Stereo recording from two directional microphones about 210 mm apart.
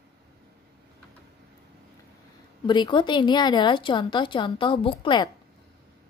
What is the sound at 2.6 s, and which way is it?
A woman's voice, 20° left (ahead or behind).